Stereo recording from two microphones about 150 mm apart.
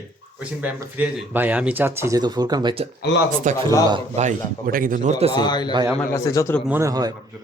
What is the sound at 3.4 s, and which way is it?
A man's voice, 55° right (ahead or behind).